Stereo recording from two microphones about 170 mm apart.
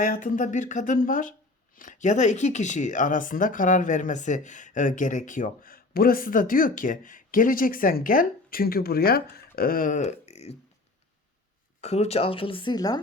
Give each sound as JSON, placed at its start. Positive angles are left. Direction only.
{"t": 0.0, "sound": "speech", "side_deg": 50}
{"t": 9.3, "sound": "beatboxing", "side_deg": 60}
{"t": 11.8, "sound": "speech", "side_deg": 40}